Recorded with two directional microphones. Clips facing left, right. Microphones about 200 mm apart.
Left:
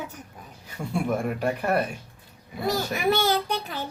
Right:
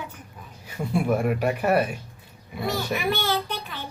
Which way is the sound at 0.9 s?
5° right (ahead or behind).